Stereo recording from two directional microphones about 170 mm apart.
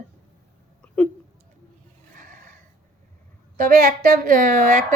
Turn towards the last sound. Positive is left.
turn(degrees=-55)  # may be behind; listen again after turning